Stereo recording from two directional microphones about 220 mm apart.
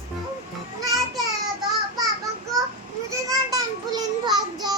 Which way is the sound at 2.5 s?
15° right (ahead or behind).